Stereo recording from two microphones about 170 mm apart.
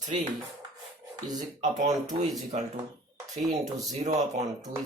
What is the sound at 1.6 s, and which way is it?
Speech, 45° right (ahead or behind).